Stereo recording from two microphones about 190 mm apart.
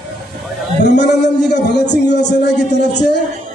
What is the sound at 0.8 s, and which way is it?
A man's voice, 65° left (ahead or behind).